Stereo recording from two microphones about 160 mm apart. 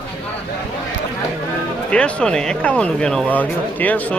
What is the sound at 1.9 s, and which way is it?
Speech, 5° left (ahead or behind).